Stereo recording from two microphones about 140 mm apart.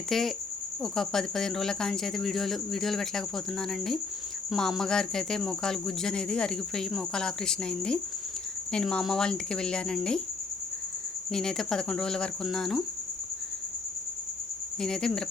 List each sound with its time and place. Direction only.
0.1 s speech: centre (ahead or behind)
11.3 s speech: 5° left (ahead or behind)
14.8 s speech: 5° left (ahead or behind)